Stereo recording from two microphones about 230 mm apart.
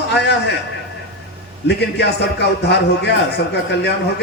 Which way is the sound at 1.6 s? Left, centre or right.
Left.